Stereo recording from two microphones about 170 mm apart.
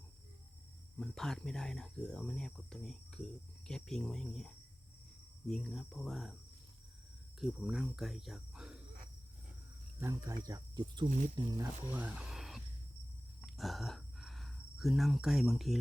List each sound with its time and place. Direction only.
0.9 s speech: 5° left (ahead or behind)
7.3 s speech: centre (ahead or behind)
10.0 s speech: 20° right (ahead or behind); by 12.6 s centre (ahead or behind)
13.4 s cricket: centre (ahead or behind)